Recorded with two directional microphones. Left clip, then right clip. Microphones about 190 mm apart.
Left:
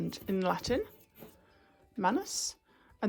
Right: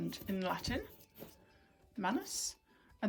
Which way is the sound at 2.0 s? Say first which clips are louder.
Left 7 dB; 30° left (ahead or behind).